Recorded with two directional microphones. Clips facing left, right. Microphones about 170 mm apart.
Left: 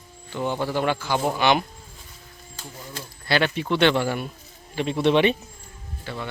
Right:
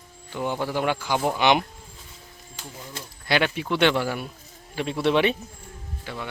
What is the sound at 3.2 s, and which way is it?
Speech, 10° right (ahead or behind).